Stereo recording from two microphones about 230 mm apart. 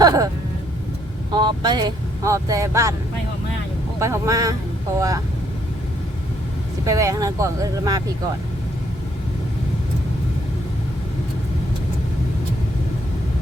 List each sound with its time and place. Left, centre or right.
0.0 s speech: centre
1.3 s speech: centre
4.0 s speech: centre
6.8 s speech: centre